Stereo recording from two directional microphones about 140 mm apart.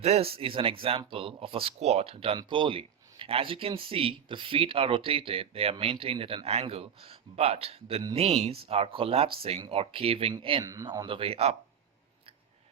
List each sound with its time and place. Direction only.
0.0 s speech: 45° right (ahead or behind)
10.6 s speech: 25° right (ahead or behind)
11.0 s speech: 40° right (ahead or behind)